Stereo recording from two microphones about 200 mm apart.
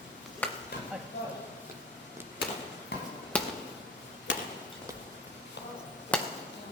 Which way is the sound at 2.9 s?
55° left (ahead or behind).